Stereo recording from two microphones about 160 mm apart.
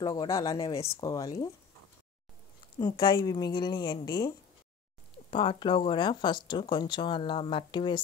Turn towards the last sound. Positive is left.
turn(degrees=30)  # may be behind; listen again after turning